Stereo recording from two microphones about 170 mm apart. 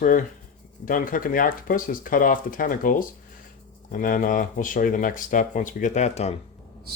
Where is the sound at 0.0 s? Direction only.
50° left (ahead or behind).